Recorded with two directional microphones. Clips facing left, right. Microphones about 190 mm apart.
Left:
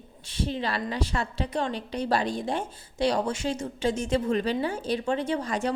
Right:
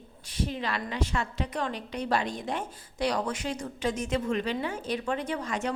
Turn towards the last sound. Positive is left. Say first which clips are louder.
# left 4 dB
turn(degrees=35)  # may be behind; listen again after turning